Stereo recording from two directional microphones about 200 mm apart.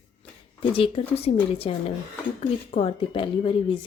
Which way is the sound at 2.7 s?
30° left (ahead or behind).